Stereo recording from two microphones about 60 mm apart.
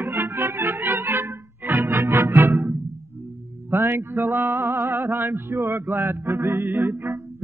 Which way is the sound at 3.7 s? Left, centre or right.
Right.